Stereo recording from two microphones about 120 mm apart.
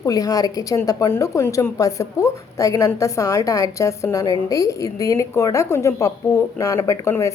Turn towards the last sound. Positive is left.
turn(degrees=25)  # may be behind; listen again after turning